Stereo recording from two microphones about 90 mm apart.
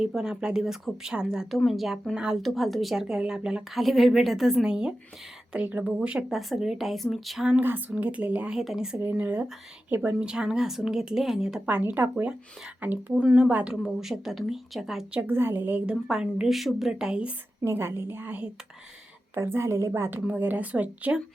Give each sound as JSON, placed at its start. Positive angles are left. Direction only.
{"t": 0.0, "sound": "a woman's voice", "side_deg": -5}
{"t": 7.6, "sound": "speech", "side_deg": -20}
{"t": 8.5, "sound": "a woman's voice", "side_deg": -5}
{"t": 9.0, "sound": "speech", "side_deg": -20}
{"t": 11.6, "sound": "a woman's voice", "side_deg": -20}
{"t": 15.2, "sound": "speech", "side_deg": -25}
{"t": 15.9, "sound": "speech", "side_deg": -10}
{"t": 17.6, "sound": "speech", "side_deg": -30}